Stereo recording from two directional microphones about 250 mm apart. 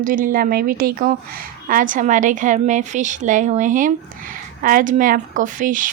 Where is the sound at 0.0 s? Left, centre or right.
Right.